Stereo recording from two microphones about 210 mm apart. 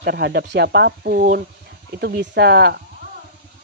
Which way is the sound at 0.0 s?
50° right (ahead or behind).